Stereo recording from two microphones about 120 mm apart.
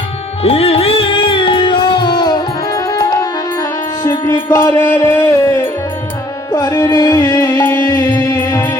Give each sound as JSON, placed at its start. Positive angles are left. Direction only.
{"t": 0.4, "sound": "music", "side_deg": 55}
{"t": 4.5, "sound": "music", "side_deg": 20}